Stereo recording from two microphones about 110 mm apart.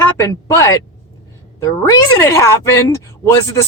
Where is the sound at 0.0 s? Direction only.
30° left (ahead or behind).